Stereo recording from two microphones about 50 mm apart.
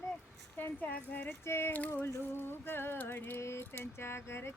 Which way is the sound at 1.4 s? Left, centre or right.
Left.